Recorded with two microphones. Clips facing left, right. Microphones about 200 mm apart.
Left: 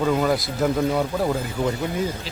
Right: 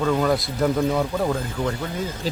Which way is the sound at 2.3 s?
40° right (ahead or behind).